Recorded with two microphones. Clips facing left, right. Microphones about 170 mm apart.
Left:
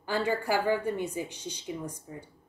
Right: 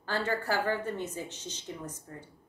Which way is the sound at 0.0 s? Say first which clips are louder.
Left 3 dB; 10° left (ahead or behind).